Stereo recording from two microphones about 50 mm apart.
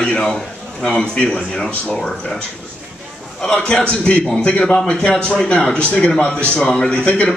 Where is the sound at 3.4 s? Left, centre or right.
Centre.